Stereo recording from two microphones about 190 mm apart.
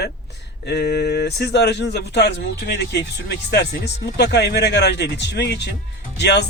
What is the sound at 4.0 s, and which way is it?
Speech, 60° left (ahead or behind).